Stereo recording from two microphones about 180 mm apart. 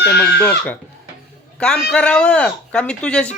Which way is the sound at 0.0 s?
65° left (ahead or behind).